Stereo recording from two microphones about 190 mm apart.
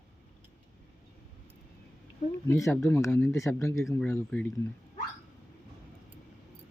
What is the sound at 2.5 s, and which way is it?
Speech, 15° left (ahead or behind).